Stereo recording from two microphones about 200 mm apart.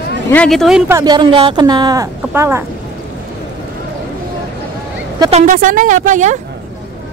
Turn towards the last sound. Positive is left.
turn(degrees=-40)  # may be behind; listen again after turning